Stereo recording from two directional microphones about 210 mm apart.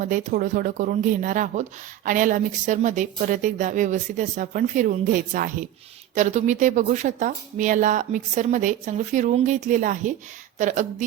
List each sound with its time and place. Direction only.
0.0 s speech: 35° right (ahead or behind)